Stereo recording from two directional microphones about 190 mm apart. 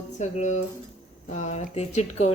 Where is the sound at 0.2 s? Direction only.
35° left (ahead or behind).